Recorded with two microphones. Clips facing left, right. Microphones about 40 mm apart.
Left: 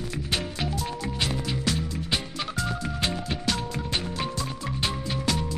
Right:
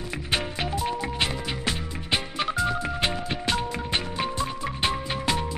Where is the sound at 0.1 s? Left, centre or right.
Right.